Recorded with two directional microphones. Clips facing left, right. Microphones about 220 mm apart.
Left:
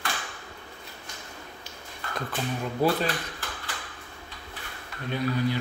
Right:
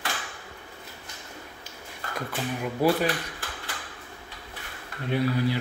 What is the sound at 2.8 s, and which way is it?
Speech, 10° right (ahead or behind).